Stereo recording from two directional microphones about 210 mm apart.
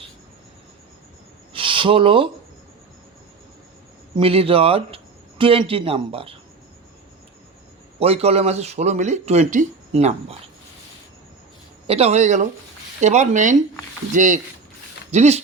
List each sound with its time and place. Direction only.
1.5 s speech: 25° right (ahead or behind)
4.1 s speech: 25° right (ahead or behind)
7.9 s speech: 30° right (ahead or behind)
11.9 s speech: 30° right (ahead or behind)